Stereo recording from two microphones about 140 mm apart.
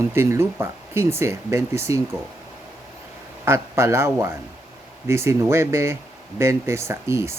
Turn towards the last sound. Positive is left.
turn(degrees=-20)  # may be behind; listen again after turning